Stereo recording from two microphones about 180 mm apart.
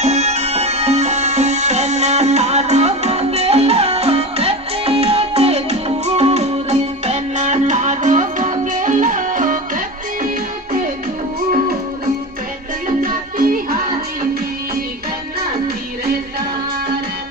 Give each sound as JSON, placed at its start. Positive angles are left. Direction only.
{"t": 0.0, "sound": "music", "side_deg": -40}
{"t": 13.0, "sound": "music", "side_deg": -50}